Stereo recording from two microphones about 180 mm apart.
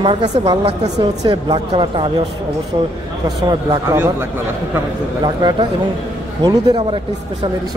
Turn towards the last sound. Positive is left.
turn(degrees=-20)  # may be behind; listen again after turning